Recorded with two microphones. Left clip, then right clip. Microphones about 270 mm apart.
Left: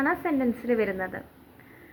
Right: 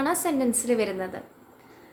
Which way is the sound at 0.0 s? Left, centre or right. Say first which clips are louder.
Right 1 dB; right.